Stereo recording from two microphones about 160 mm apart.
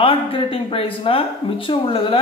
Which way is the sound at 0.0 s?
35° left (ahead or behind).